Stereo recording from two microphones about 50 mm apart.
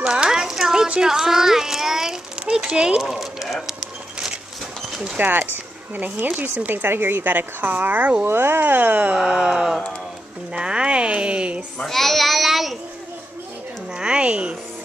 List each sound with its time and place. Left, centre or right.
0.0 s a sound: centre
3.0 s a sound: centre
5.1 s a woman's voice: right
5.4 s speech: right
6.0 s a woman's voice: right
6.7 s a woman's voice: right
8.3 s a woman's voice: right
9.1 s a sound: centre
10.5 s speech: centre
11.8 s a child's voice: centre
13.9 s speech: centre